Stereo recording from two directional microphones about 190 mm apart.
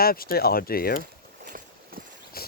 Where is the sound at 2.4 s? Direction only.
50° left (ahead or behind).